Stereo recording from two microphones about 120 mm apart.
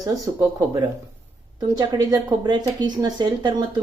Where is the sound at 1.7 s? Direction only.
35° right (ahead or behind).